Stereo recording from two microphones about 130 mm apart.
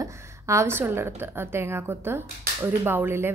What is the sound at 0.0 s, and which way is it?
A woman's voice, 20° right (ahead or behind).